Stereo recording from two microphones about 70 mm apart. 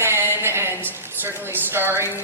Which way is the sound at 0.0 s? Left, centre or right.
Right.